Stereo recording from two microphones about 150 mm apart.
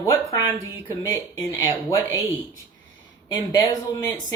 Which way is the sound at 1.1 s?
20° left (ahead or behind).